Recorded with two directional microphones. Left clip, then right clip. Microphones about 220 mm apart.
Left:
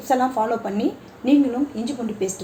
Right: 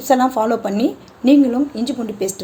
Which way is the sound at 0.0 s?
50° right (ahead or behind).